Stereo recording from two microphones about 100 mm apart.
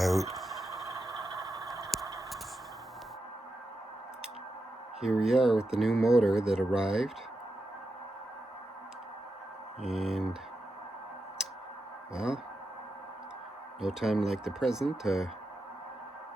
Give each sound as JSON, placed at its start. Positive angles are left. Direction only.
{"t": 0.0, "sound": "a sound", "side_deg": 0}
{"t": 0.9, "sound": "vehicle", "side_deg": -35}
{"t": 1.9, "sound": "a sound", "side_deg": 0}
{"t": 4.9, "sound": "speech", "side_deg": -5}
{"t": 9.8, "sound": "speech", "side_deg": 0}
{"t": 12.1, "sound": "speech", "side_deg": -5}
{"t": 13.8, "sound": "speech", "side_deg": -5}